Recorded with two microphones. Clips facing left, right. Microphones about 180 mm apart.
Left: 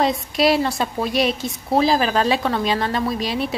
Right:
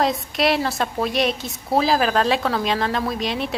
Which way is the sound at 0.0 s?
Centre (ahead or behind).